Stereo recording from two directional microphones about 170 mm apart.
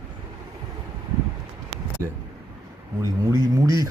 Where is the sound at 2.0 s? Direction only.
15° right (ahead or behind).